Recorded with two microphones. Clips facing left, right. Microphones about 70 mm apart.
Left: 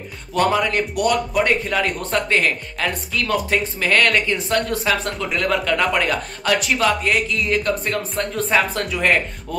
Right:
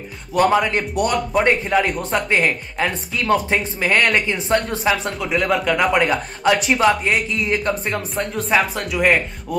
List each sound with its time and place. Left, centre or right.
0.3 s speech: centre
8.4 s speech: centre